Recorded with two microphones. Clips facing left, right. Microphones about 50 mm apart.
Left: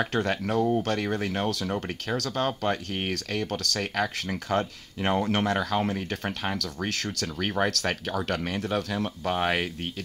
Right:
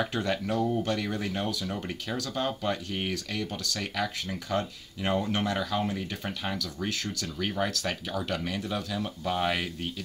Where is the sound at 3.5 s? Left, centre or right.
Left.